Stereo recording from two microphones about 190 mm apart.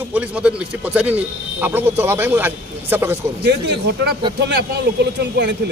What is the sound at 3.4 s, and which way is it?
Speech, 60° right (ahead or behind).